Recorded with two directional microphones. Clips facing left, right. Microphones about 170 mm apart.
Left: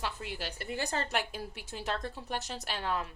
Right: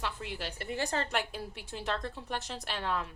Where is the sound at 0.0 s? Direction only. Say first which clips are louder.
Even; 5° left (ahead or behind).